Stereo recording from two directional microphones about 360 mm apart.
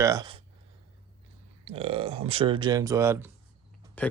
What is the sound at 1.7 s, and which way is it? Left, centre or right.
Speech, centre.